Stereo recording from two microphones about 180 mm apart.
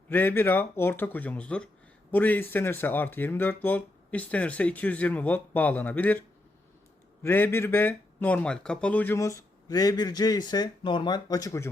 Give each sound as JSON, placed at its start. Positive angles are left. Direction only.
{"t": 0.1, "sound": "speech", "side_deg": 10}